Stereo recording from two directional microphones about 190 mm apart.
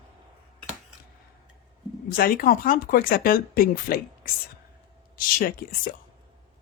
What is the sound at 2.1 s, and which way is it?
Speech, 50° left (ahead or behind).